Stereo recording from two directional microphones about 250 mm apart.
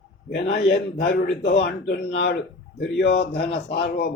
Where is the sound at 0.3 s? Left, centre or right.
Left.